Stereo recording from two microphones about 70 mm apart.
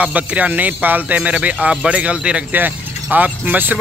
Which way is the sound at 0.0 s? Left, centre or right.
Centre.